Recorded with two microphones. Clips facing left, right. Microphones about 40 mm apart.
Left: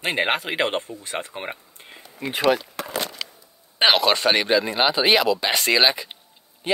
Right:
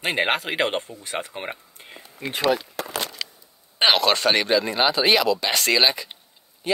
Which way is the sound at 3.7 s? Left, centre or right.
Centre.